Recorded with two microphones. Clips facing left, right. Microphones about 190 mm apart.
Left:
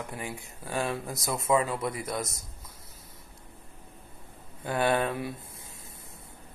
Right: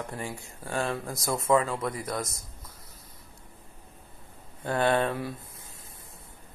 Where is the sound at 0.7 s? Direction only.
5° left (ahead or behind).